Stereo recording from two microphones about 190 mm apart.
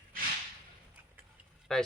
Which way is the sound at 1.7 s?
5° left (ahead or behind).